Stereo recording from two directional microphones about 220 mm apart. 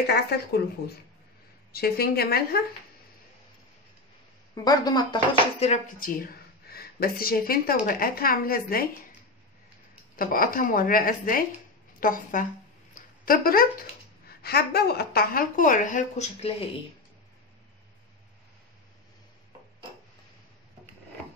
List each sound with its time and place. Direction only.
0.0 s speech: 45° left (ahead or behind)
4.6 s speech: 20° left (ahead or behind); by 8.8 s 40° left (ahead or behind)
10.1 s speech: 40° left (ahead or behind)